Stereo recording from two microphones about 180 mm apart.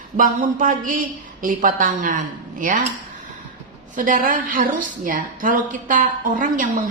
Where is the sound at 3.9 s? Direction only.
45° right (ahead or behind).